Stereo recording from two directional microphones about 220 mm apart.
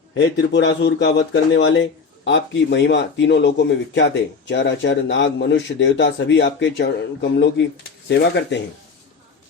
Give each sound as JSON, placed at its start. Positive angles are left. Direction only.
{"t": 0.1, "sound": "a man's voice", "side_deg": 50}